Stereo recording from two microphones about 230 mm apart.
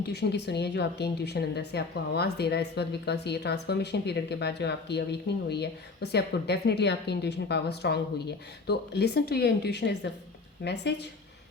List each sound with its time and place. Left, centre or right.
0.1 s a woman's voice: left